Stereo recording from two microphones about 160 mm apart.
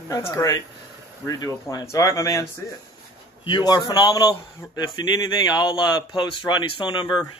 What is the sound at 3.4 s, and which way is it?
Speech, 30° left (ahead or behind).